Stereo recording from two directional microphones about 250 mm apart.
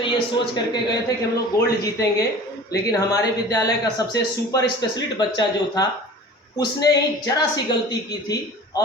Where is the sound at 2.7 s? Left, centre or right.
Centre.